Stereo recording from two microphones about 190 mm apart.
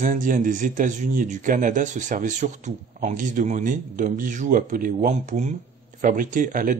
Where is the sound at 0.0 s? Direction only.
45° right (ahead or behind).